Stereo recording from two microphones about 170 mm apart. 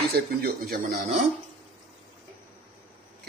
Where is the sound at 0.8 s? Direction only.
45° right (ahead or behind).